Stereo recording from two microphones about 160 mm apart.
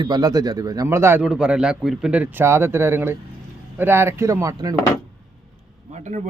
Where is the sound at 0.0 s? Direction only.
25° right (ahead or behind).